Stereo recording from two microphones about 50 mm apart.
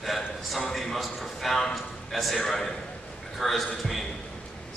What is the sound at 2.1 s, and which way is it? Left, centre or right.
A man's voice, centre.